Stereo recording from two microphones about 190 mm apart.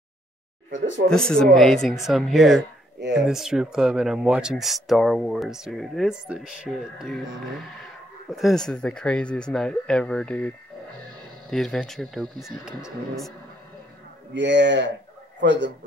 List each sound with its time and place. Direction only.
0.7 s speech: 75° right (ahead or behind)
1.0 s speech: 5° left (ahead or behind)
11.5 s speech: centre (ahead or behind)
14.3 s speech: 70° right (ahead or behind)